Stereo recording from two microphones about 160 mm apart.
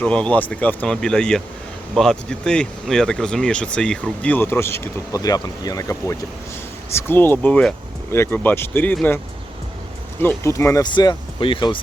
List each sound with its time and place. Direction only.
0.0 s speech: 5° left (ahead or behind); by 11.8 s 30° left (ahead or behind)